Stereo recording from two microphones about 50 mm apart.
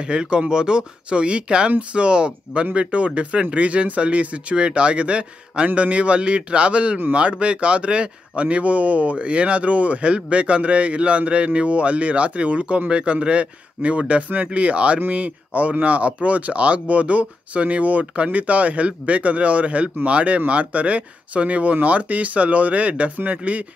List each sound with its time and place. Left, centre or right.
0.0 s speech: centre